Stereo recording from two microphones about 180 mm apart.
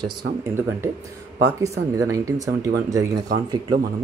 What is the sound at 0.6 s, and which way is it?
Speech, 15° right (ahead or behind).